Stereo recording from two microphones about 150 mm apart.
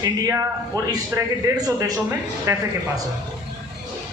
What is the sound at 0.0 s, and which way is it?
Speech, 20° right (ahead or behind).